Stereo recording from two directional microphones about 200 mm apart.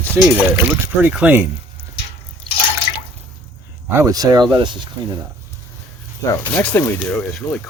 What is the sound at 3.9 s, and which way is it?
Speech, 15° right (ahead or behind).